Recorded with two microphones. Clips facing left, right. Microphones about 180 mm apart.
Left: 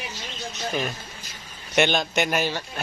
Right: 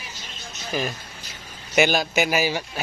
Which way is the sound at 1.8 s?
5° right (ahead or behind).